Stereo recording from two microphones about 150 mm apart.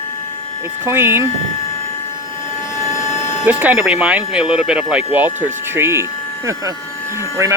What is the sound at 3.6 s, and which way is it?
Speech, 10° right (ahead or behind).